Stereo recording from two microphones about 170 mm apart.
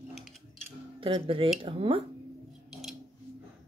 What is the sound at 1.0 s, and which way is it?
Speech, 30° right (ahead or behind).